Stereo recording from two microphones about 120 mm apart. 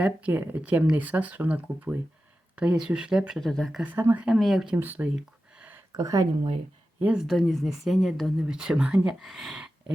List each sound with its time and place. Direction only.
0.0 s speech: 10° right (ahead or behind)
3.4 s speech: 5° left (ahead or behind)
3.9 s speech: 15° right (ahead or behind)
4.3 s speech: centre (ahead or behind)
4.8 s speech: 15° right (ahead or behind)
5.5 s a sound: 15° right (ahead or behind)
5.9 s speech: 30° right (ahead or behind)
7.0 s speech: 5° right (ahead or behind)